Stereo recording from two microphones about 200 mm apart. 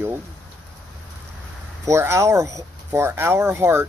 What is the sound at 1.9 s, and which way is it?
Speech, 15° right (ahead or behind).